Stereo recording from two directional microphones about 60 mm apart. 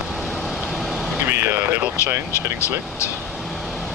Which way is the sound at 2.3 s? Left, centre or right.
Left.